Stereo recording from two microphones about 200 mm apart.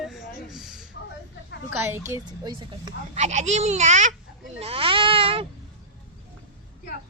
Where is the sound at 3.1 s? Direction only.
35° right (ahead or behind).